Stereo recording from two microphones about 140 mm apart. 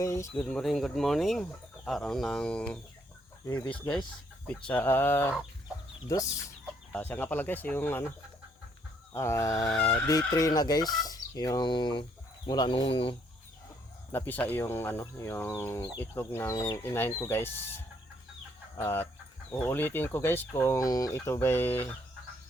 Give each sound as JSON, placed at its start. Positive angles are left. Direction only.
{"t": 0.0, "sound": "chicken", "side_deg": 20}
{"t": 0.3, "sound": "speech", "side_deg": 5}
{"t": 6.9, "sound": "speech", "side_deg": 15}
{"t": 9.1, "sound": "chicken", "side_deg": 20}
{"t": 11.0, "sound": "speech", "side_deg": 30}
{"t": 14.1, "sound": "speech", "side_deg": 15}
{"t": 18.8, "sound": "speech", "side_deg": 15}